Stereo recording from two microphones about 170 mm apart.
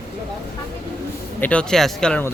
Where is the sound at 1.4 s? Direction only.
5° left (ahead or behind).